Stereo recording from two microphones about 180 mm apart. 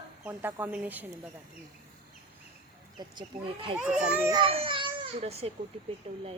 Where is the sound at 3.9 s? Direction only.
5° right (ahead or behind).